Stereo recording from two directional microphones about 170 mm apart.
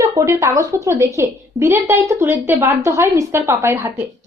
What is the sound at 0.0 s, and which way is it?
A woman's voice, 15° right (ahead or behind).